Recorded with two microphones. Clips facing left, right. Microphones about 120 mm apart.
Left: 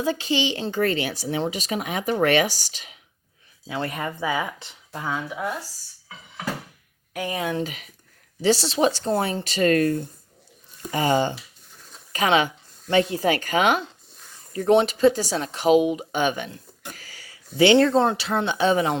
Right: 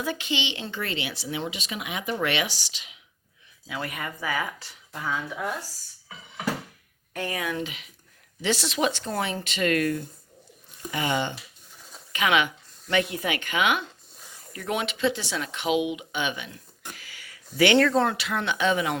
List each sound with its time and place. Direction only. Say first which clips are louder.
0.0 s speech: left 6 dB; 30° left (ahead or behind)
3.7 s speech: left 5 dB; 30° left (ahead or behind)
7.1 s speech: left 2 dB; 15° left (ahead or behind)
7.3 s speech: left 5 dB; 25° left (ahead or behind)
7.6 s speech: left 4 dB; 40° left (ahead or behind)